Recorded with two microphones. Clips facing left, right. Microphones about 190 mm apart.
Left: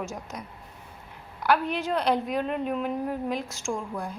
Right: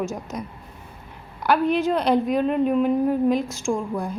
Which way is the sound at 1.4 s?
20° right (ahead or behind).